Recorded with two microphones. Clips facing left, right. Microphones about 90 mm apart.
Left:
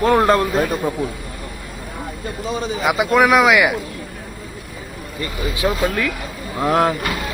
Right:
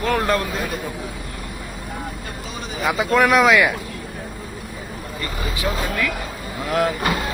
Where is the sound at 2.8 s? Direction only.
15° left (ahead or behind).